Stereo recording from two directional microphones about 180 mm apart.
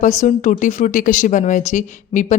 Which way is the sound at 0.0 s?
40° left (ahead or behind).